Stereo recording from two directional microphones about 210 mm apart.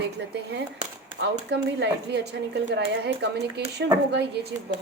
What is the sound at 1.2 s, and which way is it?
A woman's voice, 55° right (ahead or behind).